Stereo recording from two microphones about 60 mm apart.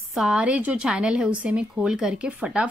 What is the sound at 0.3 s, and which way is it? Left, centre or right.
Speech, right.